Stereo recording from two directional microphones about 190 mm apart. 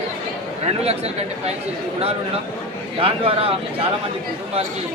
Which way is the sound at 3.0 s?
30° right (ahead or behind).